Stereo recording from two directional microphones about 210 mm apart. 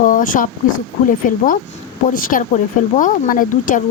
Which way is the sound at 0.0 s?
40° left (ahead or behind).